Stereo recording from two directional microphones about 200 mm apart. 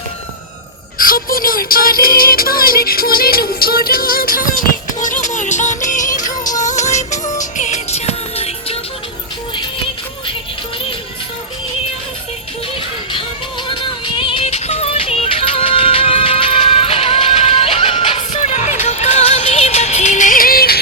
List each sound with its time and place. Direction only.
0.9 s music: 45° left (ahead or behind); by 8.8 s 30° left (ahead or behind)
12.7 s music: 25° left (ahead or behind); by 20.7 s 50° left (ahead or behind)